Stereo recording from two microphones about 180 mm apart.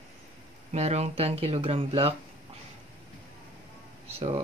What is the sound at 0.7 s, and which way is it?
Speech, 35° right (ahead or behind).